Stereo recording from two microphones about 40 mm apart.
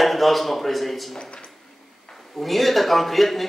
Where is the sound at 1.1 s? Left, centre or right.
Left.